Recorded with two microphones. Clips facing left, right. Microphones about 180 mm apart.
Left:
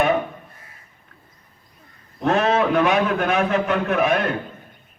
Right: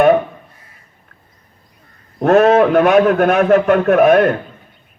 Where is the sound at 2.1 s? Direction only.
55° right (ahead or behind).